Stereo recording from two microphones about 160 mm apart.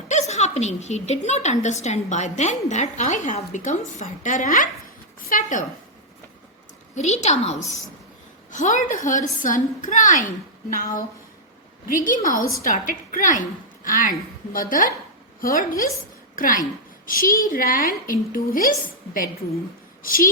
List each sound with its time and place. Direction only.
0.1 s a woman's voice: 45° left (ahead or behind)
6.9 s a woman's voice: 45° left (ahead or behind)
8.5 s a woman's voice: 50° left (ahead or behind)
20.0 s speech: 60° left (ahead or behind)